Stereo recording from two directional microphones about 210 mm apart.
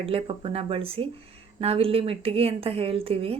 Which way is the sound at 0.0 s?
25° right (ahead or behind).